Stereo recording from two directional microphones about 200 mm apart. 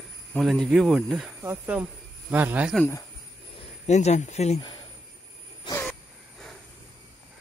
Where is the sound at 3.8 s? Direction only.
35° left (ahead or behind).